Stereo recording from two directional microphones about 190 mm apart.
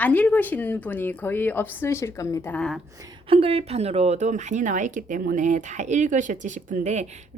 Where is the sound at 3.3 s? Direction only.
30° right (ahead or behind).